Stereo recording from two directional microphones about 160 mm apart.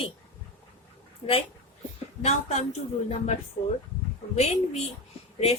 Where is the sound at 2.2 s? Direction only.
45° left (ahead or behind).